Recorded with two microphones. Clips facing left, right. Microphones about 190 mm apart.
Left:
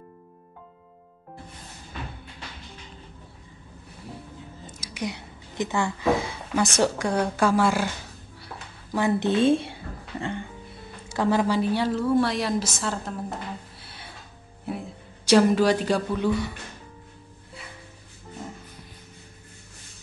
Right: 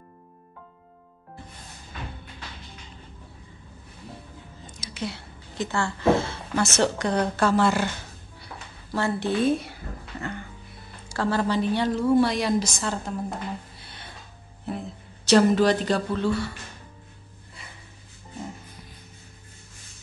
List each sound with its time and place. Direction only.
4.6 s speech: 15° left (ahead or behind)
8.9 s speech: 20° left (ahead or behind)
11.1 s a woman's voice: 15° left (ahead or behind); by 13.1 s centre (ahead or behind)
13.7 s music: 5° left (ahead or behind)
14.7 s a woman's voice: 10° left (ahead or behind)